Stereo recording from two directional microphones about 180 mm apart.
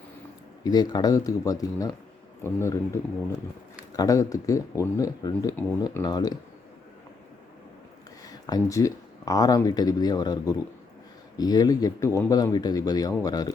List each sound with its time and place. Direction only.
0.6 s speech: 20° left (ahead or behind)
8.4 s speech: 20° left (ahead or behind)